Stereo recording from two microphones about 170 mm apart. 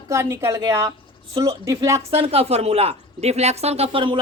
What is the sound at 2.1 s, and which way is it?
A woman's voice, 35° right (ahead or behind).